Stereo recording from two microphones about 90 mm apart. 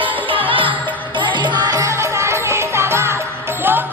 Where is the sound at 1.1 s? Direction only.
60° right (ahead or behind).